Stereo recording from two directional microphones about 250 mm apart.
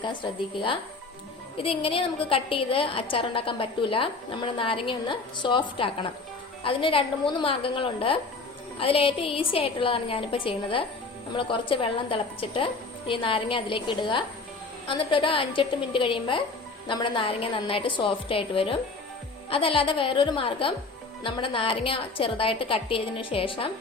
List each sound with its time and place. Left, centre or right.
0.0 s a woman's voice: centre